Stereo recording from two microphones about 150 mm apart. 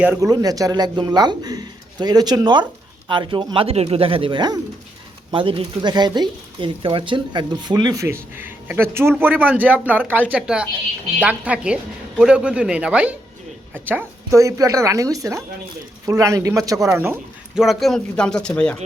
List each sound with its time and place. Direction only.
0.2 s speech: 25° right (ahead or behind)
17.5 s speech: centre (ahead or behind)